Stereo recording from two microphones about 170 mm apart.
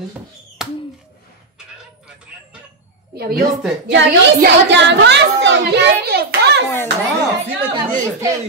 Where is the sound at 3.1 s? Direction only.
65° right (ahead or behind).